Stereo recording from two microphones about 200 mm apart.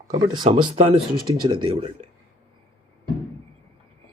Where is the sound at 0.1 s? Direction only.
20° right (ahead or behind).